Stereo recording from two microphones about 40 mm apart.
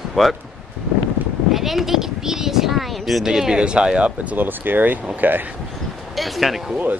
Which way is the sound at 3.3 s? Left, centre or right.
Centre.